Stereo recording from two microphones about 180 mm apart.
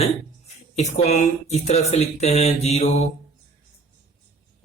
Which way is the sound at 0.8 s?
40° left (ahead or behind).